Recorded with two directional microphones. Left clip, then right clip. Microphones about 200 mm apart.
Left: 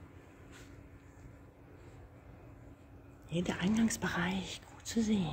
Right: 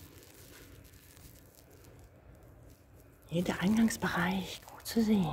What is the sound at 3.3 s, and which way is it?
Speech, centre (ahead or behind).